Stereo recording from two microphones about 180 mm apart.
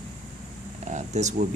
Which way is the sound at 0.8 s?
40° right (ahead or behind).